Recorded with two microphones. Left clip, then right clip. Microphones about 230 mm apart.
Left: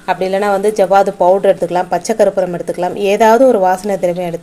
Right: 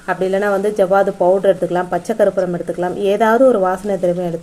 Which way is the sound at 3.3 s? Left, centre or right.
Left.